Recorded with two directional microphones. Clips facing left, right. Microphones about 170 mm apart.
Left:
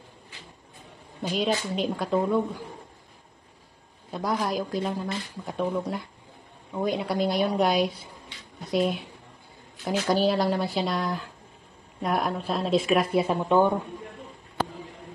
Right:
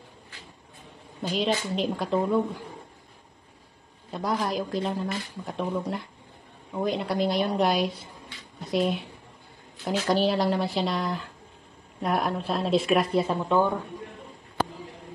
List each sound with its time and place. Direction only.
1.2 s speech: centre (ahead or behind)
4.1 s speech: centre (ahead or behind)
13.3 s speech: 15° left (ahead or behind)